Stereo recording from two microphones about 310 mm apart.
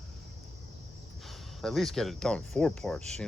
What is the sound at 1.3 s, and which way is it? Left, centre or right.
Speech, centre.